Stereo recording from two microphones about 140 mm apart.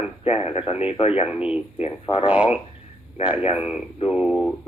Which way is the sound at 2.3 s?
10° right (ahead or behind).